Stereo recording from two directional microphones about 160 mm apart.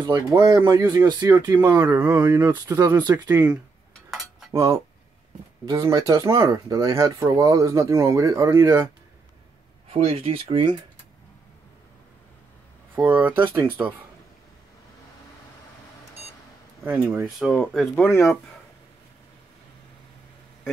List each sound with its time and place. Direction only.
0.0 s speech: 25° right (ahead or behind)
4.1 s cutlery: centre (ahead or behind)
4.5 s cutlery: 20° right (ahead or behind)
5.7 s speech: 25° right (ahead or behind)
9.8 s speech: 35° right (ahead or behind)
12.9 s speech: 10° right (ahead or behind)
16.8 s speech: 10° right (ahead or behind)
17.9 s speech: 10° left (ahead or behind)